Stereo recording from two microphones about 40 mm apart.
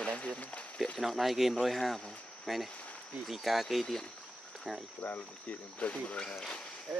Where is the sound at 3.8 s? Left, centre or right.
Centre.